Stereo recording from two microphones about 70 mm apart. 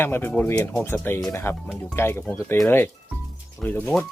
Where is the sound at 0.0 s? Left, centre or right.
Left.